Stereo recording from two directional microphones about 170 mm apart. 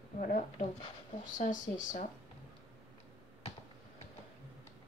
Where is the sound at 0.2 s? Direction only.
50° left (ahead or behind).